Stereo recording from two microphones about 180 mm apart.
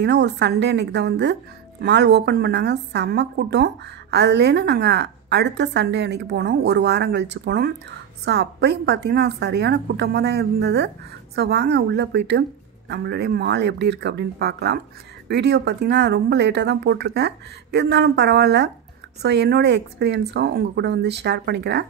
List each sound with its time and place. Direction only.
0.0 s a woman's voice: 70° right (ahead or behind)